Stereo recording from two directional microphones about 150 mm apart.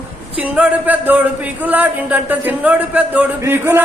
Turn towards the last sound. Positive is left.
turn(degrees=-15)  # may be behind; listen again after turning